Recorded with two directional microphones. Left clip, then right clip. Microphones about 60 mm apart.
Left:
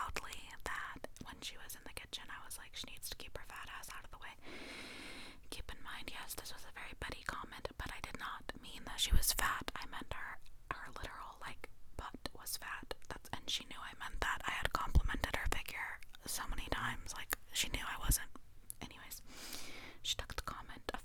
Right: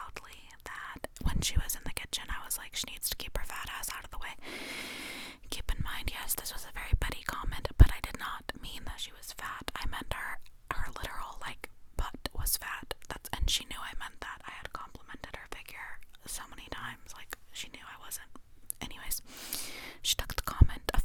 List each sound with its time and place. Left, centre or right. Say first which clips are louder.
0.0 s whispering: left 2 dB; centre
0.6 s whispering: even; centre
1.3 s whispering: right 15 dB; right
9.1 s speech: left 5 dB; left
9.6 s whispering: right 7 dB; right
14.2 s whispering: left 5 dB; left
15.7 s whispering: left 1 dB; centre
18.8 s whispering: right 9 dB; right